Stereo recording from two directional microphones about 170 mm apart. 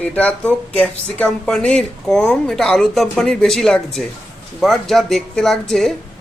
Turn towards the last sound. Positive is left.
turn(degrees=0)  # may be behind; listen again after turning